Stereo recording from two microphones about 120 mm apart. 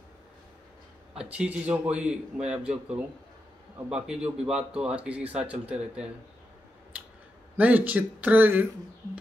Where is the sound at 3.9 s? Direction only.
5° right (ahead or behind).